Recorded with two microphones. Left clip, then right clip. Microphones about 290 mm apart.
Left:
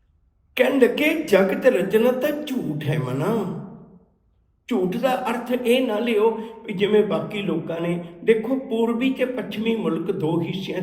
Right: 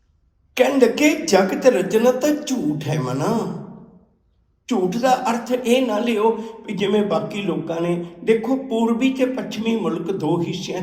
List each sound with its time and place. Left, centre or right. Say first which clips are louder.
0.5 s speech: right 2 dB; centre
4.6 s speech: right 3 dB; centre